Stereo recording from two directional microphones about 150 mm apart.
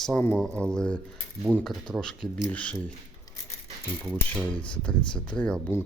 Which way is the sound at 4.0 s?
5° left (ahead or behind).